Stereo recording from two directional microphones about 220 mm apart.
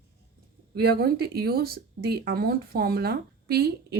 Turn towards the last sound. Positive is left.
turn(degrees=-45)  # may be behind; listen again after turning